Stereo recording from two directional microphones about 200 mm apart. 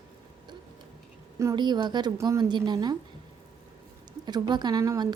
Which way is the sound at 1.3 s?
20° right (ahead or behind).